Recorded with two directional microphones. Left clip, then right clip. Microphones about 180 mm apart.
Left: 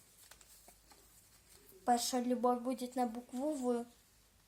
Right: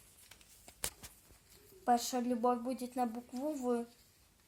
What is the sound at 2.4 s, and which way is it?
Speech, 10° right (ahead or behind).